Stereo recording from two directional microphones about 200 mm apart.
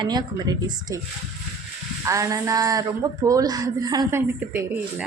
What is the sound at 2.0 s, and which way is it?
A woman's voice, 15° right (ahead or behind).